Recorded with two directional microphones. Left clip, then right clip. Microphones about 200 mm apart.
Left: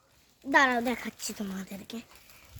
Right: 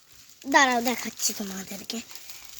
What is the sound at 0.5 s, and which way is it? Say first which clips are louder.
Speech: right 3 dB; 20° right (ahead or behind).